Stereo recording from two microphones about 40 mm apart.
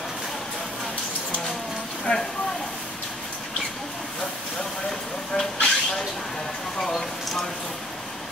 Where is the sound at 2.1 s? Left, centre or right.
Left.